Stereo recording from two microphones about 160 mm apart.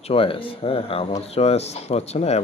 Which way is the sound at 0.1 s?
35° left (ahead or behind).